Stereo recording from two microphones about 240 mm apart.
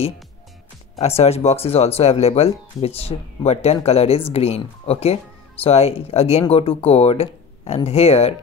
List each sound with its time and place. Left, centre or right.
0.9 s speech: left